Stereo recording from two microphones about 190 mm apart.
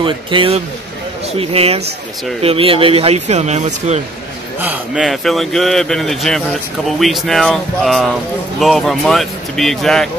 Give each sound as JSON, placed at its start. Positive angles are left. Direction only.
{"t": 0.0, "sound": "speech", "side_deg": -25}
{"t": 4.6, "sound": "speech", "side_deg": -5}